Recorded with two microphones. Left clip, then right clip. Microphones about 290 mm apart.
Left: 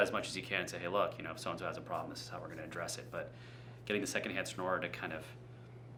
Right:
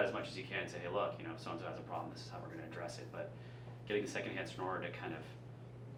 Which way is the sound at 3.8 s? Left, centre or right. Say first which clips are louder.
Left 2 dB; left.